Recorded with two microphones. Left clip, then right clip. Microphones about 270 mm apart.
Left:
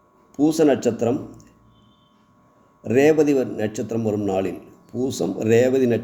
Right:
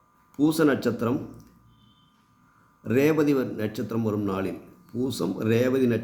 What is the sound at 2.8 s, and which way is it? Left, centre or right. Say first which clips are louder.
A man's voice: left 6 dB; centre.